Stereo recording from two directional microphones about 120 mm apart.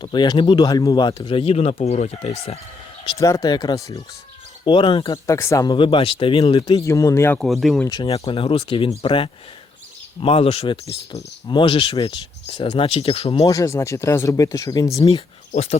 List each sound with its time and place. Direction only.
0.0 s speech: 40° left (ahead or behind); by 2.6 s 65° left (ahead or behind)
3.2 s speech: 25° left (ahead or behind)
4.6 s speech: 45° left (ahead or behind)
5.1 s speech: 25° left (ahead or behind)
5.7 s speech: 45° left (ahead or behind)
6.6 s speech: 30° left (ahead or behind)
7.3 s speech: centre (ahead or behind)
8.0 s speech: 55° left (ahead or behind)
11.1 s speech: 40° left (ahead or behind)
13.5 s speech: 25° left (ahead or behind)
15.0 s speech: 60° left (ahead or behind)